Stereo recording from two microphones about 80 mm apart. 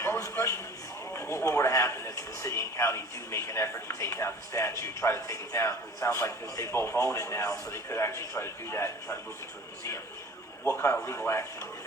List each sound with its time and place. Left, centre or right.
0.0 s a sound: left
1.1 s speech: left
10.6 s speech: left